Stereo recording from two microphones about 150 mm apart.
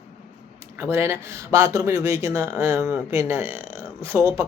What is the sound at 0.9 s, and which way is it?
Speech, 15° right (ahead or behind).